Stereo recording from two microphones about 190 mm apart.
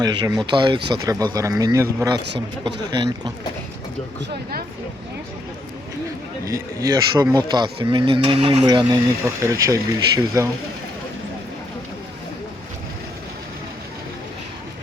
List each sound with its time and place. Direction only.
0.0 s speech: 20° right (ahead or behind)
2.2 s speech: 65° right (ahead or behind)
2.9 s speech: 25° right (ahead or behind)
6.4 s speech: 15° right (ahead or behind)
8.6 s speech: 20° right (ahead or behind)